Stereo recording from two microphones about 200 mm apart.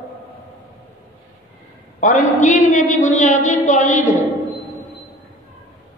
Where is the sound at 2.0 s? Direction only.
40° left (ahead or behind).